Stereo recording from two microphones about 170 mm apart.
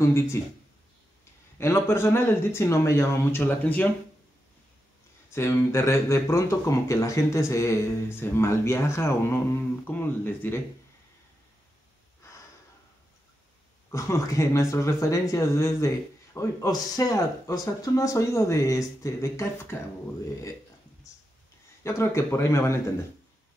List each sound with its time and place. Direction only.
0.0 s speech: 15° left (ahead or behind)
1.6 s speech: 15° left (ahead or behind)
5.3 s speech: 15° left (ahead or behind)
13.8 s speech: 15° left (ahead or behind)
21.8 s speech: 15° left (ahead or behind)